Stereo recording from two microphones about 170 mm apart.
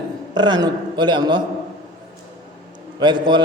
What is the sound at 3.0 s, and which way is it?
Speech, 25° right (ahead or behind).